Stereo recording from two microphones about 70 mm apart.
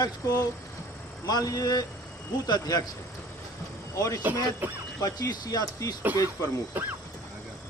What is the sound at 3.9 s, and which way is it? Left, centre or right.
Speech, left.